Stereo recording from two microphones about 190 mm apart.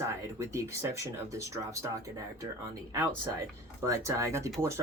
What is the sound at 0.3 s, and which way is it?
Speech, 15° right (ahead or behind).